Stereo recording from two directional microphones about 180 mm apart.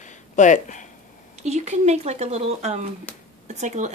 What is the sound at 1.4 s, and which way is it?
Speech, 40° right (ahead or behind).